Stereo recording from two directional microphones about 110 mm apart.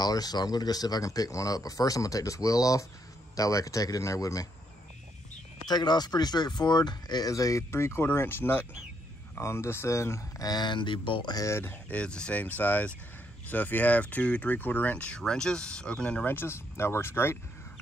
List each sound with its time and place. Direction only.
0.0 s speech: 35° left (ahead or behind)
5.7 s speech: 40° left (ahead or behind)
10.5 s speech: 45° left (ahead or behind)
11.3 s speech: 25° left (ahead or behind)
11.9 s speech: 10° left (ahead or behind)